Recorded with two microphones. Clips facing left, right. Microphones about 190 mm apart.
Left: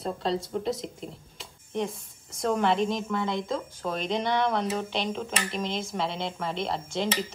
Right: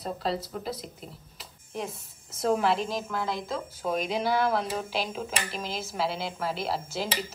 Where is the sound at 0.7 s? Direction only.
25° left (ahead or behind).